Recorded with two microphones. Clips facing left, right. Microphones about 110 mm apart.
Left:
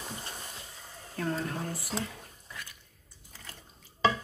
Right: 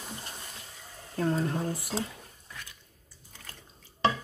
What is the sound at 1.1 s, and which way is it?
Speech, 25° right (ahead or behind).